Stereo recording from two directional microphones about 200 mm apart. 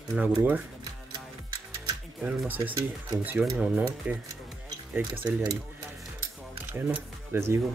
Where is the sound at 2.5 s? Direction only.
15° right (ahead or behind).